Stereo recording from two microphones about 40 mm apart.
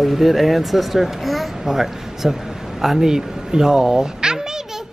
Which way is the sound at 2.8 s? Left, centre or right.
Centre.